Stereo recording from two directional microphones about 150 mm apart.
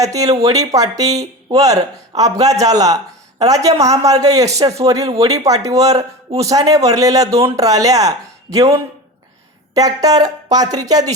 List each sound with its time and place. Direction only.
0.0 s speech: 20° right (ahead or behind)
9.7 s speech: 25° right (ahead or behind)